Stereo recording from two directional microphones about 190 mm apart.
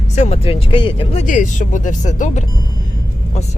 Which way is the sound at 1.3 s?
40° left (ahead or behind).